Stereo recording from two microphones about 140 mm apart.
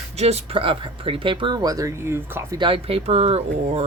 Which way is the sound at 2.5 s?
35° right (ahead or behind).